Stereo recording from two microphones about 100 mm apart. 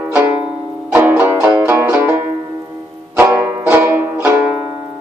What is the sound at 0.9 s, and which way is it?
Music, 15° right (ahead or behind).